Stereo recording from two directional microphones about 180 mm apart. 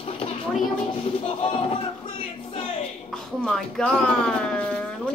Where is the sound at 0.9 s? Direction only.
30° left (ahead or behind).